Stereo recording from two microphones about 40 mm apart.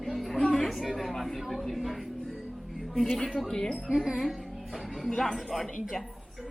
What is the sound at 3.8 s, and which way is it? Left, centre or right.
Speech, centre.